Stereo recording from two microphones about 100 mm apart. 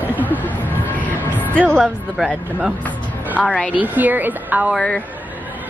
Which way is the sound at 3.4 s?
10° left (ahead or behind).